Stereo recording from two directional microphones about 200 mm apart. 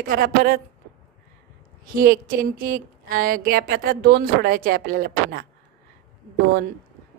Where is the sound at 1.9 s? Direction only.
45° right (ahead or behind).